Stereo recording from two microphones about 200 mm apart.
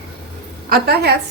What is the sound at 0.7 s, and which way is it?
Speech, 50° right (ahead or behind).